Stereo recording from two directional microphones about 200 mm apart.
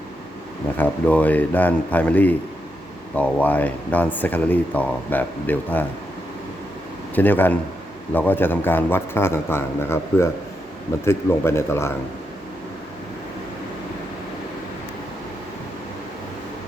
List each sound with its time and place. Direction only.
0.8 s speech: 5° left (ahead or behind)
7.2 s speech: 10° left (ahead or behind)